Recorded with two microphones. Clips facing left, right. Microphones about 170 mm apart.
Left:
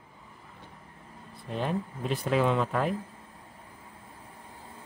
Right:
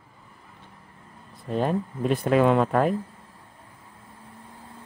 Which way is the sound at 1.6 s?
50° right (ahead or behind).